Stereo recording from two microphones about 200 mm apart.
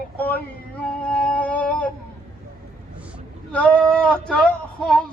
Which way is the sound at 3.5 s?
5° left (ahead or behind).